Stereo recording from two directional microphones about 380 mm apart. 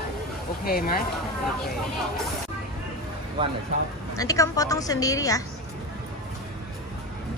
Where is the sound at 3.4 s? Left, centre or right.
Centre.